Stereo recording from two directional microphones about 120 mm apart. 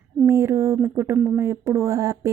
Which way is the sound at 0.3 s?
25° right (ahead or behind).